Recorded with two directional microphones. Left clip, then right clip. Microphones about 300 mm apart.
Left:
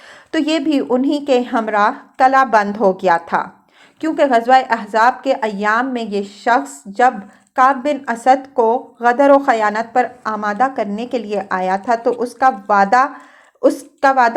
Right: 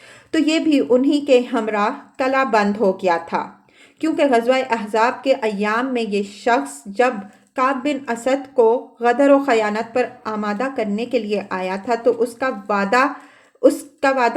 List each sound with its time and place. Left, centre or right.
0.3 s a woman's voice: centre